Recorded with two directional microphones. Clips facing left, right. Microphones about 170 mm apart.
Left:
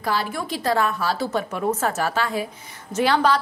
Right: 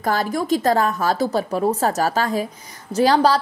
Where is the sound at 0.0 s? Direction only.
45° right (ahead or behind).